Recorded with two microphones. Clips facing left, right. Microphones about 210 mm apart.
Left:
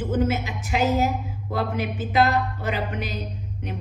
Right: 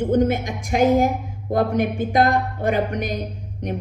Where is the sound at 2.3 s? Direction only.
55° right (ahead or behind).